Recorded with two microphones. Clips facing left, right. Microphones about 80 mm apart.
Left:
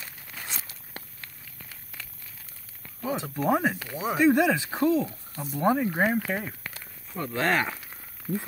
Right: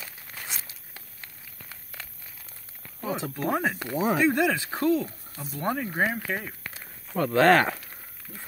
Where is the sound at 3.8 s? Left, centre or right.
Right.